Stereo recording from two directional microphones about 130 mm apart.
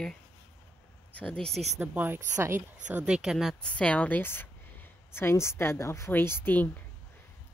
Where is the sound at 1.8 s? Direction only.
15° right (ahead or behind).